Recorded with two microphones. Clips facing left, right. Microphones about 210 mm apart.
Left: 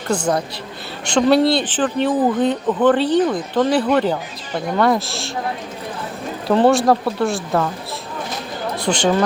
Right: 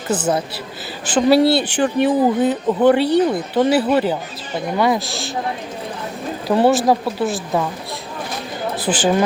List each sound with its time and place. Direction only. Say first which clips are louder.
0.1 s speech: even; 5° right (ahead or behind)
6.5 s speech: left 1 dB; 5° right (ahead or behind)
8.7 s speech: even; 5° right (ahead or behind)